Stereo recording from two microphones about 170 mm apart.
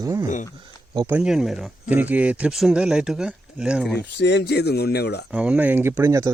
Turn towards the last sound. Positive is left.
turn(degrees=-15)  # may be behind; listen again after turning